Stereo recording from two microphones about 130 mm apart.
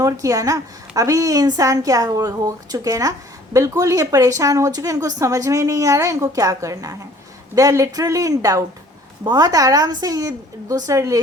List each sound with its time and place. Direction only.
0.0 s a woman's voice: 25° right (ahead or behind)